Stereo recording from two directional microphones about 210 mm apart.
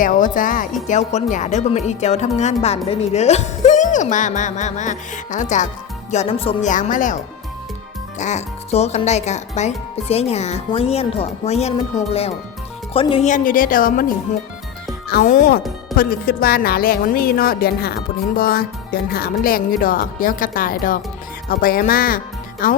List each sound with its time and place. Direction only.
0.0 s speech: 40° left (ahead or behind)
8.2 s speech: 35° left (ahead or behind)
15.1 s speech: 40° left (ahead or behind)